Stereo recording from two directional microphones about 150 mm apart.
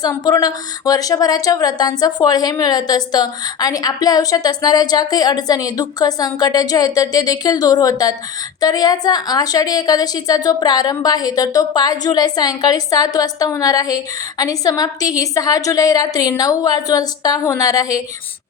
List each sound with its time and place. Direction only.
0.0 s a woman's voice: 25° left (ahead or behind)